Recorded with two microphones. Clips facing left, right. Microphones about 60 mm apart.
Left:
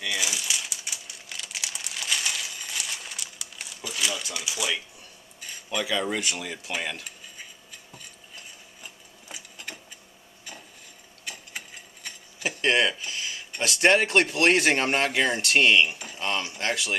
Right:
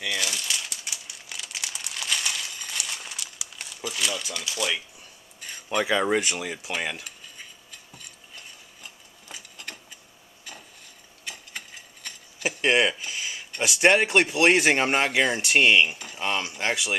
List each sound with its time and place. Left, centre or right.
0.1 s typewriter: centre
1.3 s crumpling: centre
5.8 s speech: right
6.3 s speech: centre
7.1 s cutlery: centre
8.8 s sewing machine: centre
11.2 s sewing machine: centre
12.4 s a sound: centre
13.6 s speech: centre